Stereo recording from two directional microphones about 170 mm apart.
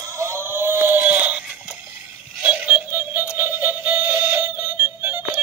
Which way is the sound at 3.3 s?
10° right (ahead or behind).